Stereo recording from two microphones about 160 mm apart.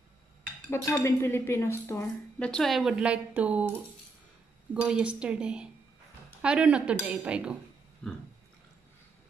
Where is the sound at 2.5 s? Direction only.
Centre (ahead or behind).